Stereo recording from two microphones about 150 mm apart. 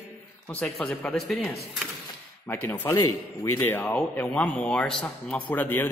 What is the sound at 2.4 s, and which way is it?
Speech, 15° left (ahead or behind).